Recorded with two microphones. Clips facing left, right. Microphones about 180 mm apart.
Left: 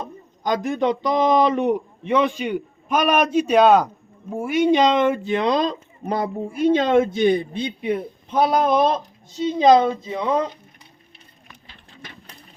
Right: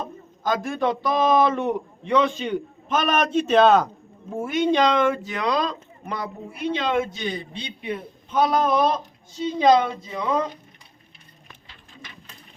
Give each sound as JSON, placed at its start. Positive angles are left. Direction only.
{"t": 0.0, "sound": "a man's voice", "side_deg": 20}
{"t": 6.7, "sound": "a man's voice", "side_deg": 50}
{"t": 7.8, "sound": "speech", "side_deg": 20}